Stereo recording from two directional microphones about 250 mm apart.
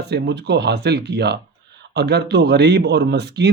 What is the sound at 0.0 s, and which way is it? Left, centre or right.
Speech, right.